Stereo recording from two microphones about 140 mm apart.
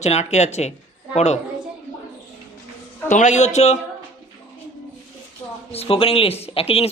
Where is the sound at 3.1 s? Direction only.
60° left (ahead or behind).